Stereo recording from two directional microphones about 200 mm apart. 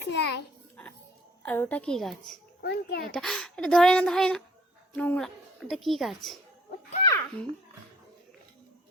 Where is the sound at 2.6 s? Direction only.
55° left (ahead or behind).